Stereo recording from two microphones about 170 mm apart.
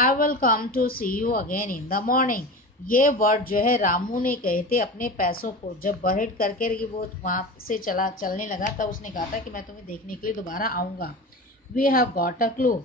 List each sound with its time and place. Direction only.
0.0 s speech: 55° left (ahead or behind)